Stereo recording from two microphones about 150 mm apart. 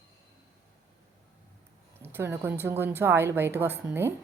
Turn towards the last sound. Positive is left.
turn(degrees=-15)  # may be behind; listen again after turning